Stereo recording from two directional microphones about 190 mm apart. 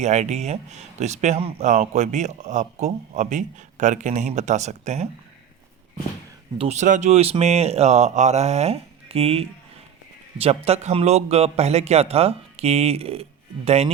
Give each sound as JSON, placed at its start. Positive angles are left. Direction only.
{"t": 0.0, "sound": "speech", "side_deg": -35}
{"t": 6.6, "sound": "speech", "side_deg": -35}